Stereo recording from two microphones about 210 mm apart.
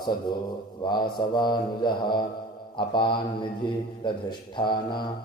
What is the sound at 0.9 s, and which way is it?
Mantra, 20° left (ahead or behind).